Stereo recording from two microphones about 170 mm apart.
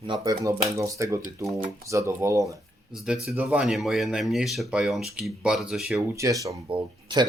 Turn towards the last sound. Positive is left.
turn(degrees=-25)  # may be behind; listen again after turning